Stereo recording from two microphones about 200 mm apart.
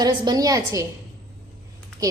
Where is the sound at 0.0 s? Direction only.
20° right (ahead or behind).